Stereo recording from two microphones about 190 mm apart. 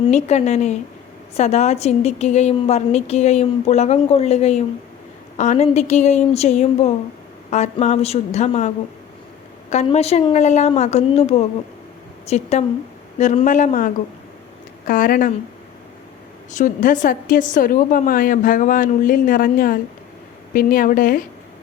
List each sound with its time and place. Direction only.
0.1 s a woman's voice: 35° left (ahead or behind)
16.5 s a woman's voice: 40° left (ahead or behind)